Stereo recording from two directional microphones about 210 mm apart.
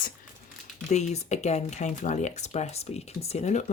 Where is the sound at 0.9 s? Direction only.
35° left (ahead or behind).